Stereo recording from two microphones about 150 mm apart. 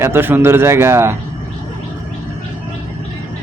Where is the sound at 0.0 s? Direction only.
15° right (ahead or behind).